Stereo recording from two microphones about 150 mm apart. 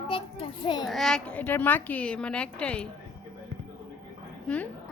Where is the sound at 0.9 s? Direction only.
Centre (ahead or behind).